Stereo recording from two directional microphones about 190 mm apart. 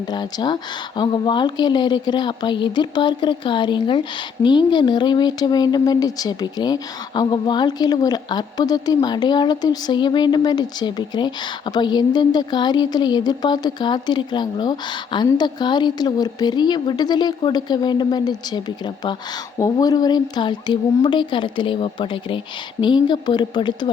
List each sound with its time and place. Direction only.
0.1 s a woman's voice: 20° left (ahead or behind)